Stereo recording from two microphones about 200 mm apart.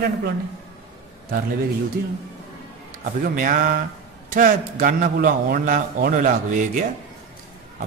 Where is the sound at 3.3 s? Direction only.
40° right (ahead or behind).